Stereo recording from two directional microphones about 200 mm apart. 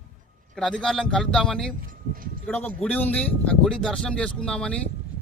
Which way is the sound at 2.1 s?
45° right (ahead or behind).